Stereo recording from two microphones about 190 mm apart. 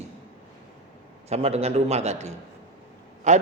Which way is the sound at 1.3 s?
35° right (ahead or behind).